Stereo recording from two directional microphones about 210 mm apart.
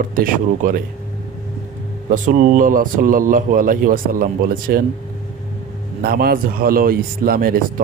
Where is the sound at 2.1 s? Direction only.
40° right (ahead or behind).